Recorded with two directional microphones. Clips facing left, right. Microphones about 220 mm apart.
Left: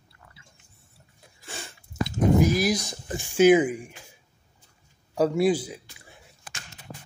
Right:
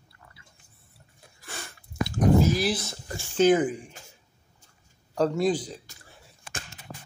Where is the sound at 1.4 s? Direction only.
15° left (ahead or behind).